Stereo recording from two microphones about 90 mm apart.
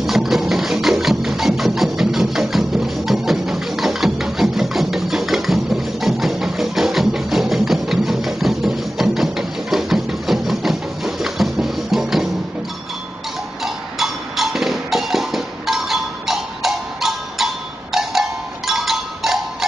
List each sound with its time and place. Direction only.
0.0 s music: centre (ahead or behind)
13.6 s music: centre (ahead or behind)
18.7 s music: centre (ahead or behind)